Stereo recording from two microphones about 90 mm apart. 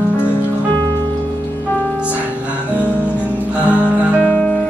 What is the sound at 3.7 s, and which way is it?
Music, 15° right (ahead or behind).